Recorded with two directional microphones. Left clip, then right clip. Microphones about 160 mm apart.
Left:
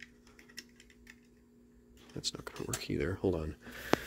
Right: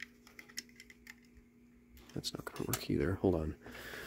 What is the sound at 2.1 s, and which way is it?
Speech, 25° right (ahead or behind).